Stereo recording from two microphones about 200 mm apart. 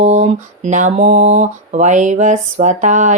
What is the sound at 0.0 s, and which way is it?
Mantra, 35° right (ahead or behind).